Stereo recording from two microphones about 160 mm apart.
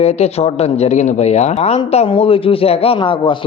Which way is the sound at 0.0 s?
40° left (ahead or behind).